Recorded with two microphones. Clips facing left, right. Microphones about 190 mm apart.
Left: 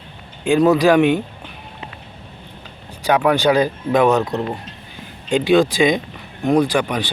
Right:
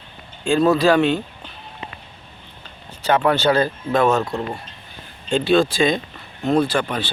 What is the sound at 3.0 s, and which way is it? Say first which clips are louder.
Speech: left 2 dB; 10° left (ahead or behind).